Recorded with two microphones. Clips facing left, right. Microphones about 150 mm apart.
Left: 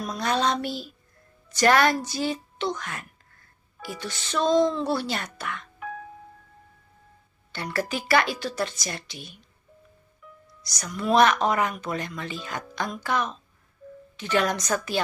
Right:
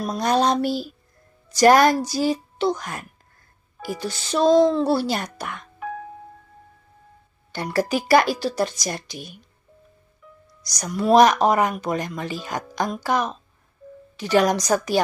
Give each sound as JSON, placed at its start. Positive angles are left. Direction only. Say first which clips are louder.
{"t": 0.0, "sound": "speech", "louder": "right 5 dB", "side_deg": -35}
{"t": 7.7, "sound": "speech", "louder": "right 6 dB", "side_deg": -40}
{"t": 10.2, "sound": "music", "louder": "right 1 dB", "side_deg": -30}
{"t": 10.6, "sound": "speech", "louder": "right 6 dB", "side_deg": -40}